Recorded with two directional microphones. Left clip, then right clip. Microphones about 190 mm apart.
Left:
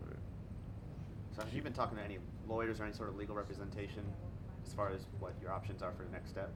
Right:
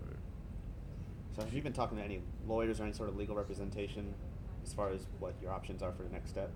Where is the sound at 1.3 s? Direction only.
40° left (ahead or behind).